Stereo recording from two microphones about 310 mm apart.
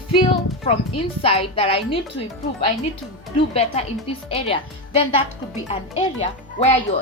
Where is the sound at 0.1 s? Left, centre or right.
Centre.